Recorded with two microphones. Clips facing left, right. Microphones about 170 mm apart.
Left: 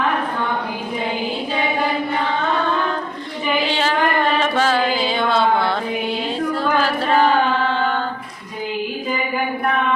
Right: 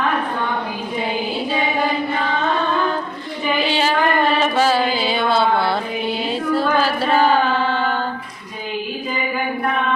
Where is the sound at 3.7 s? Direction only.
10° right (ahead or behind).